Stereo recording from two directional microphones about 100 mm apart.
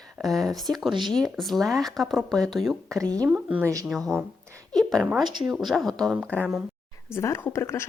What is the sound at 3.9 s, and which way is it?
Speech, 5° left (ahead or behind).